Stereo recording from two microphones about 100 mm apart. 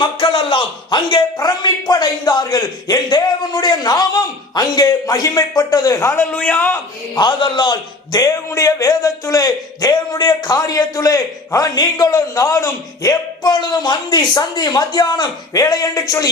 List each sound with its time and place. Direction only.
0.0 s a man's voice: 55° left (ahead or behind); by 6.2 s 30° left (ahead or behind)
6.3 s a man's voice: 15° left (ahead or behind)
7.2 s a man's voice: 50° left (ahead or behind)